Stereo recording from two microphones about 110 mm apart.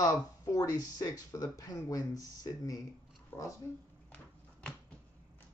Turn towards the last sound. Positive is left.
turn(degrees=10)  # may be behind; listen again after turning